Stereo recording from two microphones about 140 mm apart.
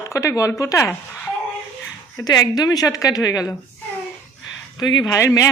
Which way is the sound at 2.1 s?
30° left (ahead or behind).